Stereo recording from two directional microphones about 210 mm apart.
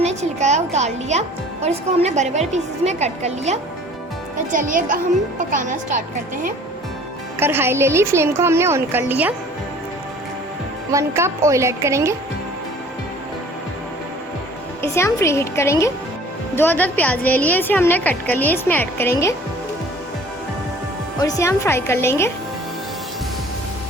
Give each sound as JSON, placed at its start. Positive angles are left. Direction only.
{"t": 0.0, "sound": "a woman's voice", "side_deg": -30}
{"t": 7.3, "sound": "a woman's voice", "side_deg": -10}
{"t": 10.9, "sound": "a woman's voice", "side_deg": -15}
{"t": 14.8, "sound": "a woman's voice", "side_deg": 15}
{"t": 21.2, "sound": "a woman's voice", "side_deg": 15}